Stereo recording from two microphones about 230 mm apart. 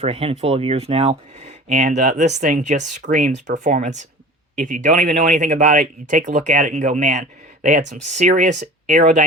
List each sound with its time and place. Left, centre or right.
0.0 s speech: right